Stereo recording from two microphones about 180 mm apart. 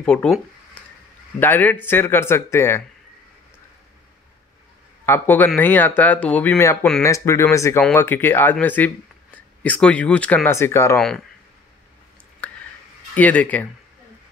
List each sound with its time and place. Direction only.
0.0 s speech: 5° left (ahead or behind)
1.4 s speech: 10° left (ahead or behind)
5.0 s speech: 10° left (ahead or behind)
11.0 s speech: centre (ahead or behind)
12.4 s a sound: 5° left (ahead or behind)
13.1 s speech: 10° left (ahead or behind)